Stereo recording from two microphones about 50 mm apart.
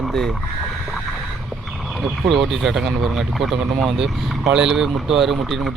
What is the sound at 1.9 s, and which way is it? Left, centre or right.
Speech, centre.